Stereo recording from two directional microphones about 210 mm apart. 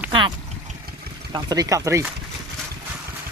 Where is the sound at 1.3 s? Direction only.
20° right (ahead or behind).